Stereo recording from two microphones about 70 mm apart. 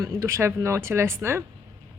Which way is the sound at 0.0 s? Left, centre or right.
Right.